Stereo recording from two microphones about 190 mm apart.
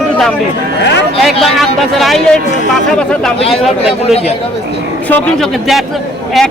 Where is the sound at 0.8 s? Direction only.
65° left (ahead or behind).